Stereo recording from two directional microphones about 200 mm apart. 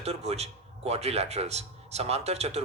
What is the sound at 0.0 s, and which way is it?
Speech, 30° right (ahead or behind).